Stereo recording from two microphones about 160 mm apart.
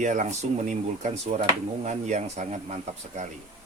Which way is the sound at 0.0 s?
50° right (ahead or behind).